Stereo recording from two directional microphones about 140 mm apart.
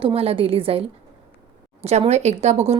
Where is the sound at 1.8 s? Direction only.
50° right (ahead or behind).